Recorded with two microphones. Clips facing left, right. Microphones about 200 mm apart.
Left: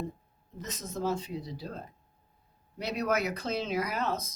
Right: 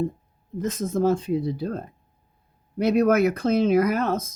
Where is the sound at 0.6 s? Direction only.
50° right (ahead or behind).